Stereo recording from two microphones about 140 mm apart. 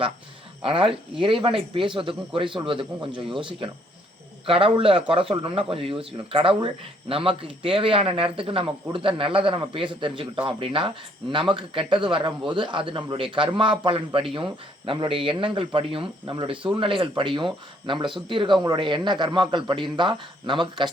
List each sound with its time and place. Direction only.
0.6 s speech: 40° right (ahead or behind)